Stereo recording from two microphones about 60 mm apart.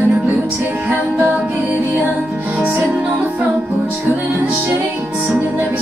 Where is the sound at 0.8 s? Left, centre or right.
Right.